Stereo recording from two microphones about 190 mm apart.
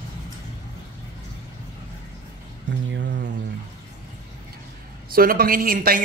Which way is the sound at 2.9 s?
70° right (ahead or behind).